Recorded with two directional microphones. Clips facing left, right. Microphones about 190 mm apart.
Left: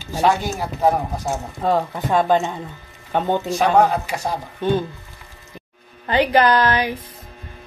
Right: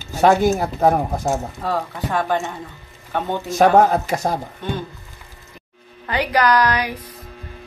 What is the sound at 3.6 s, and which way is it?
Speech, 45° right (ahead or behind).